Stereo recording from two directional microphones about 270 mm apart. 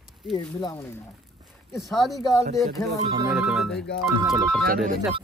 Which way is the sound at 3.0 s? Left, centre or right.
Centre.